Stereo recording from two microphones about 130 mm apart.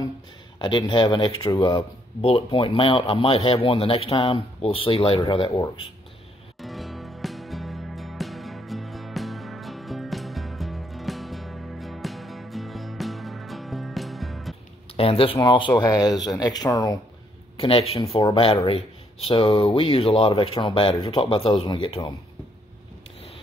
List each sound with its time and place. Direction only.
0.6 s speech: 40° left (ahead or behind)
6.6 s music: centre (ahead or behind)
15.0 s speech: 45° left (ahead or behind); by 17.0 s 30° left (ahead or behind)
17.6 s speech: 45° left (ahead or behind)